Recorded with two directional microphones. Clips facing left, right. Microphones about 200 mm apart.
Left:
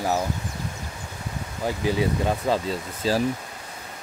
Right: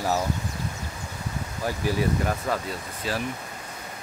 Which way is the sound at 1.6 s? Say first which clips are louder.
Left 2 dB; 20° left (ahead or behind).